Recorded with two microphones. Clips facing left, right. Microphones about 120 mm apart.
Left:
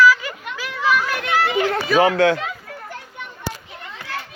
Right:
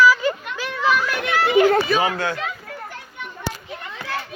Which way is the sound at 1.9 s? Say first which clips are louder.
Left 6 dB; 90° left.